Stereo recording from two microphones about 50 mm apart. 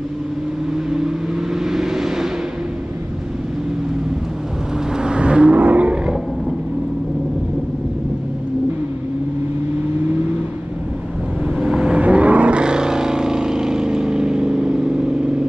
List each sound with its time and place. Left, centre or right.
0.8 s vehicle: centre
4.9 s vehicle: centre
11.4 s vehicle: centre
12.0 s vehicle: right